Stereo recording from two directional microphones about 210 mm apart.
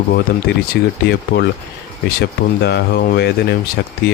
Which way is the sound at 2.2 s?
50° left (ahead or behind).